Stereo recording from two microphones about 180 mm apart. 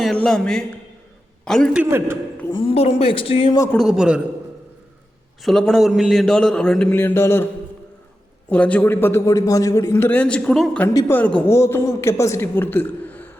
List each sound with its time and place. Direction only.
0.0 s a man's voice: centre (ahead or behind)
1.8 s a man's voice: 10° right (ahead or behind)
2.5 s speech: 30° left (ahead or behind)
3.8 s a man's voice: 5° right (ahead or behind)
5.4 s a man's voice: centre (ahead or behind)
8.4 s a man's voice: 5° left (ahead or behind)
10.8 s a man's voice: 15° left (ahead or behind)